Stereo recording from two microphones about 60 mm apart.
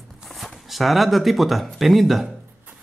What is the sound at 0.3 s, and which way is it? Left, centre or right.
Speech, centre.